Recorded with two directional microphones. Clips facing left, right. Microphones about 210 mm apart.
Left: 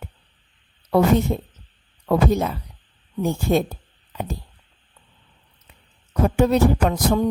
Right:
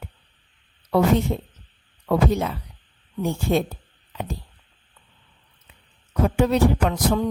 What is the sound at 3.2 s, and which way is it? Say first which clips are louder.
Speech: left 2 dB; 45° left (ahead or behind).